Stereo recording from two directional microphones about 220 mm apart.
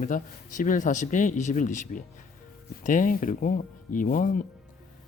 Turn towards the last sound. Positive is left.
turn(degrees=40)  # may be behind; listen again after turning